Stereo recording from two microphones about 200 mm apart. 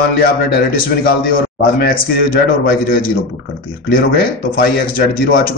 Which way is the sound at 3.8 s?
45° left (ahead or behind).